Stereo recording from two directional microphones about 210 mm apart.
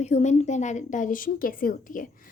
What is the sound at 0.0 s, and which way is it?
A woman's voice, 35° left (ahead or behind).